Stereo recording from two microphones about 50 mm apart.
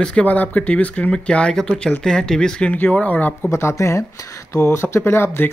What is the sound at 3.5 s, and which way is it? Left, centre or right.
Speech, left.